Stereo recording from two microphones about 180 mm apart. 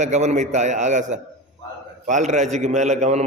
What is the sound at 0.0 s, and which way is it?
A man's voice, 40° right (ahead or behind).